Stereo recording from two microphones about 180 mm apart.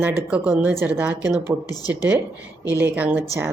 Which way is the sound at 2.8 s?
10° right (ahead or behind).